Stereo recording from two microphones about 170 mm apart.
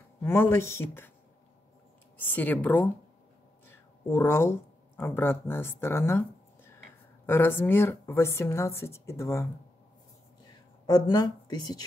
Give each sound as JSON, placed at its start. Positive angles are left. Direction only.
{"t": 0.2, "sound": "speech", "side_deg": 15}
{"t": 2.2, "sound": "speech", "side_deg": 10}
{"t": 4.1, "sound": "speech", "side_deg": 15}
{"t": 7.2, "sound": "speech", "side_deg": 15}
{"t": 10.9, "sound": "speech", "side_deg": 20}